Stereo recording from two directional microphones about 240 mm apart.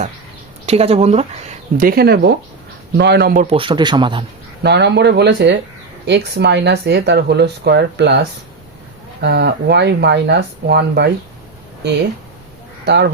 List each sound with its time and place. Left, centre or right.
0.6 s a man's voice: right
1.8 s speech: right
3.4 s a man's voice: right
4.6 s speech: right
12.8 s speech: right